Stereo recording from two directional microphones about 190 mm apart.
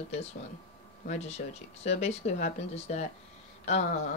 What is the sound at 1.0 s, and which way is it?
Speech, 35° left (ahead or behind).